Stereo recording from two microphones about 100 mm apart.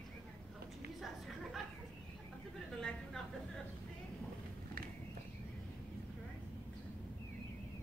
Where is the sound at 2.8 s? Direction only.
5° left (ahead or behind).